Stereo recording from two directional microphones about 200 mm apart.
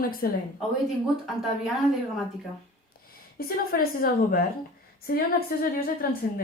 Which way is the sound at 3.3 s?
50° left (ahead or behind).